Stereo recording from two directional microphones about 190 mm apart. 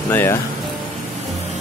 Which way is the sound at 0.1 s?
10° left (ahead or behind).